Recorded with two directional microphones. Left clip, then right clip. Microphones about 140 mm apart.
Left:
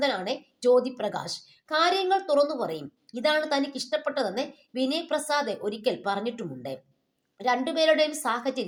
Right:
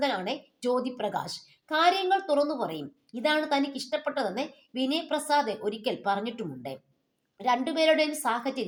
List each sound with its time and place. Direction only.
0.0 s a woman's voice: 35° left (ahead or behind)